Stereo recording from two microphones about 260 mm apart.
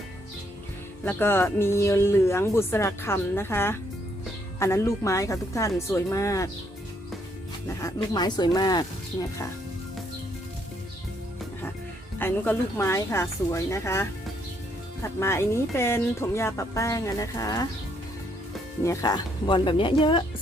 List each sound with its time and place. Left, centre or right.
1.0 s speech: centre
7.7 s speech: centre
12.2 s speech: centre
18.8 s speech: centre